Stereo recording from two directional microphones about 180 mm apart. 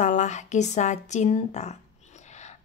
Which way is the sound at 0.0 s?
40° left (ahead or behind).